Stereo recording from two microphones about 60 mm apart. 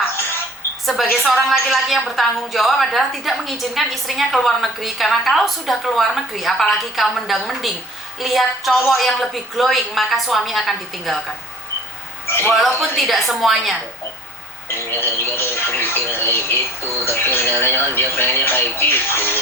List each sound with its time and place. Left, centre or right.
1.1 s a woman's voice: centre
12.3 s a man's voice: left
12.5 s a woman's voice: centre
14.7 s speech: left